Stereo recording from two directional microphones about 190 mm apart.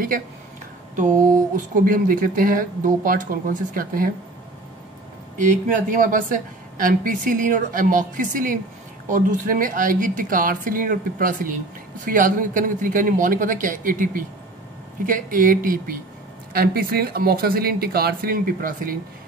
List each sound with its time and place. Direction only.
1.9 s a woman's voice: 45° right (ahead or behind)
5.4 s a woman's voice: 45° right (ahead or behind)